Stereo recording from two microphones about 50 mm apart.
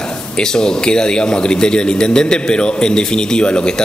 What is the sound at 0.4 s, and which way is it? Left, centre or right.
Speech, centre.